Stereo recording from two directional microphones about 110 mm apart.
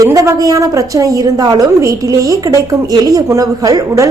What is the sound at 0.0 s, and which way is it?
A woman's voice, 30° right (ahead or behind).